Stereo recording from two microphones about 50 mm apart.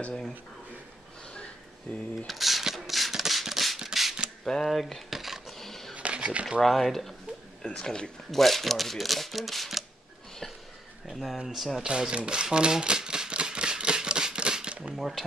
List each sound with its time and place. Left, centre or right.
1.9 s speech: centre
2.2 s a sound: centre
4.5 s a sound: centre
5.9 s a sound: right
6.6 s speech: centre
7.6 s speech: centre
8.3 s speech: centre
11.1 s speech: centre
11.8 s typewriter: centre
15.0 s speech: centre